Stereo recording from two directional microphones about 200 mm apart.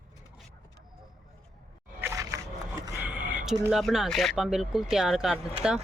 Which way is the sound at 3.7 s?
Centre (ahead or behind).